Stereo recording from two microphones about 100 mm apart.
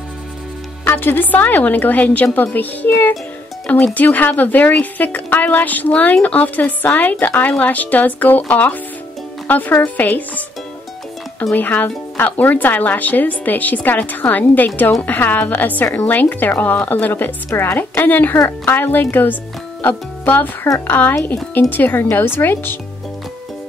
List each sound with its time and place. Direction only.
0.8 s speech: 20° left (ahead or behind)
11.5 s a woman's voice: 20° left (ahead or behind)